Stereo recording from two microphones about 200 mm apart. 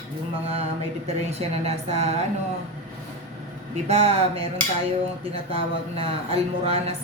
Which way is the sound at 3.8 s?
35° right (ahead or behind).